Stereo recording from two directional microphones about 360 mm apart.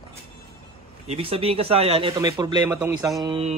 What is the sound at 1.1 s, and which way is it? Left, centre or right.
Speech, centre.